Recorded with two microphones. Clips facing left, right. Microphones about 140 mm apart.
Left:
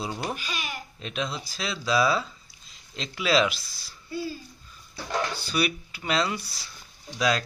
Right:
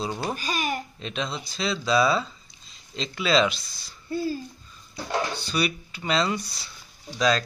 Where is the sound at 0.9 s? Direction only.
5° left (ahead or behind).